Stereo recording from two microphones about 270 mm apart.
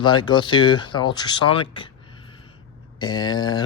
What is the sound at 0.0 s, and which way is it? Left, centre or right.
Speech, centre.